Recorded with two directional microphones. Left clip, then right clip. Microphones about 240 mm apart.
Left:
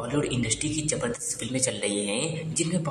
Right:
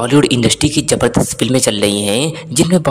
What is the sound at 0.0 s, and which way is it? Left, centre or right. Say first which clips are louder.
Speech: right 16 dB; right.